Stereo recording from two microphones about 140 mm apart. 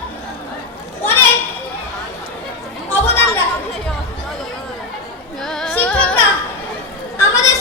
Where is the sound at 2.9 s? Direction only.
15° left (ahead or behind).